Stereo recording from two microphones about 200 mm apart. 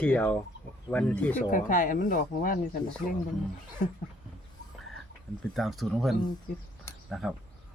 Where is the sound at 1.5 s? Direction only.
40° left (ahead or behind).